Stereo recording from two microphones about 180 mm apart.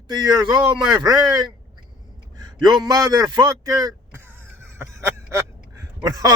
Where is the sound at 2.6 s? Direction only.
20° right (ahead or behind).